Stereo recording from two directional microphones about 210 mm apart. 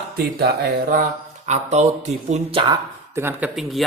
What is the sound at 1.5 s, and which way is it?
Speech, 35° right (ahead or behind).